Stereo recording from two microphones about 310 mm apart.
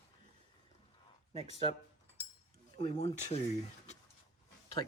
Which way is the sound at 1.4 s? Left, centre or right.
Centre.